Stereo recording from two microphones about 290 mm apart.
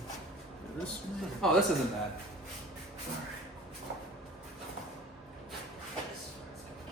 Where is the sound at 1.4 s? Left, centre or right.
Centre.